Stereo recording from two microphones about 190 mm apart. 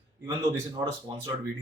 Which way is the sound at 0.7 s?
20° right (ahead or behind).